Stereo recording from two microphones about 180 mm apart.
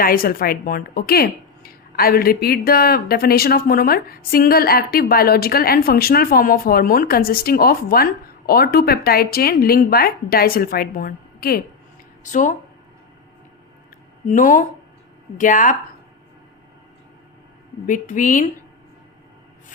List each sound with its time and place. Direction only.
0.0 s speech: 55° left (ahead or behind)
12.2 s a woman's voice: 45° left (ahead or behind)
14.3 s a woman's voice: 45° left (ahead or behind)
17.8 s a woman's voice: 45° left (ahead or behind)